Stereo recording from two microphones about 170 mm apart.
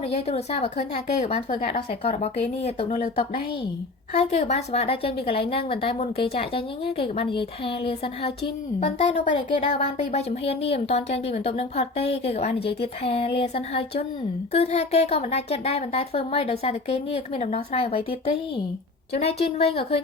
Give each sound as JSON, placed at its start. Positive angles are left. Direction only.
{"t": 0.0, "sound": "speech", "side_deg": 40}
{"t": 1.6, "sound": "speech", "side_deg": 55}
{"t": 2.0, "sound": "speech", "side_deg": 40}
{"t": 4.1, "sound": "speech", "side_deg": 40}